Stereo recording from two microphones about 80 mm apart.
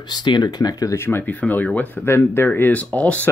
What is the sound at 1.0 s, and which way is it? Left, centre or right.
Speech, left.